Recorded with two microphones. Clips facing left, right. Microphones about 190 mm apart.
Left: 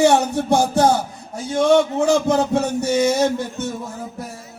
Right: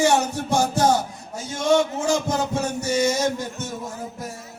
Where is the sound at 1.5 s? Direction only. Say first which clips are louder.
Left 5 dB; 60° left (ahead or behind).